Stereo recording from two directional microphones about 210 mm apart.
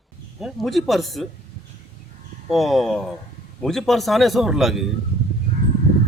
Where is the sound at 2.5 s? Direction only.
Centre (ahead or behind).